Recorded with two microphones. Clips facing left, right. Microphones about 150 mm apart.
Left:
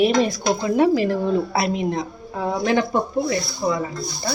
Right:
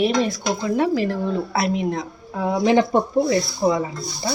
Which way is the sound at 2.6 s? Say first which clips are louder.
Right 4 dB; 25° right (ahead or behind).